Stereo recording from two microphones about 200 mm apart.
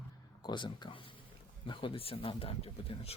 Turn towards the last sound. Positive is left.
turn(degrees=30)  # may be behind; listen again after turning